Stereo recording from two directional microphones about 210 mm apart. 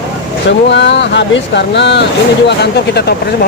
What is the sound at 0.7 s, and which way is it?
Speech, 55° left (ahead or behind).